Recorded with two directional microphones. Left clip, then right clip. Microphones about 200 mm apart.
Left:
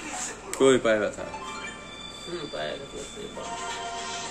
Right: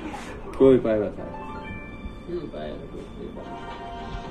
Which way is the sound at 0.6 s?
15° left (ahead or behind).